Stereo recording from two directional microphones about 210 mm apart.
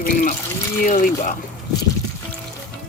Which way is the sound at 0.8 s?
40° left (ahead or behind).